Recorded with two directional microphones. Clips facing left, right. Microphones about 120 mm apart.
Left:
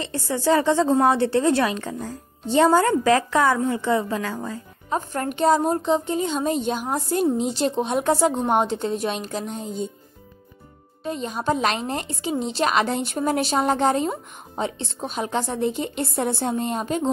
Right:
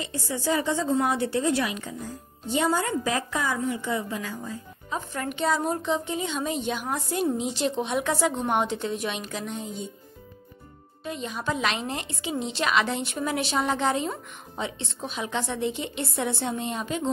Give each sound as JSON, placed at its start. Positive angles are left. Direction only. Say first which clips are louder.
{"t": 0.0, "sound": "a woman's voice", "louder": "left 6 dB", "side_deg": 65}
{"t": 4.9, "sound": "a woman's voice", "louder": "left 6 dB", "side_deg": 45}
{"t": 11.1, "sound": "a woman's voice", "louder": "left 6 dB", "side_deg": 40}